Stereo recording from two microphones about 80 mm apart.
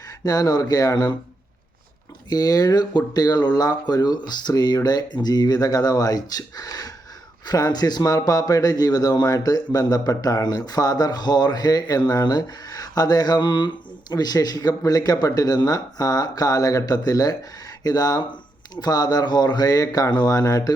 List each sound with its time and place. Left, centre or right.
0.3 s speech: left
2.3 s a man's voice: left
14.1 s a man's voice: left